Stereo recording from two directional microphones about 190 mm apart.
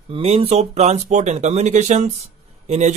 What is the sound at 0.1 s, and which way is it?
A man's voice, 30° right (ahead or behind).